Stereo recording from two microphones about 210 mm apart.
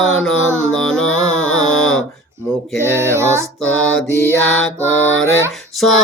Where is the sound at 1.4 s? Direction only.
75° left (ahead or behind).